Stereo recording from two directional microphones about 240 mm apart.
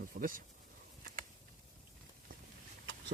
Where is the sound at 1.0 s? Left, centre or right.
Right.